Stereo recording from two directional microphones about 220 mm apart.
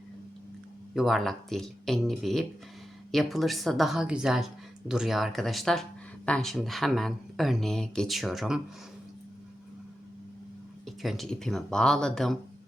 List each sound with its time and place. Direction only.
0.9 s speech: centre (ahead or behind)
10.8 s speech: centre (ahead or behind)